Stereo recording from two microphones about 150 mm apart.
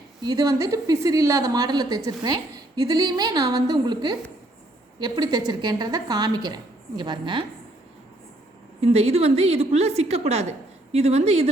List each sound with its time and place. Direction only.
0.2 s a woman's voice: 25° right (ahead or behind)
8.8 s a woman's voice: 45° right (ahead or behind)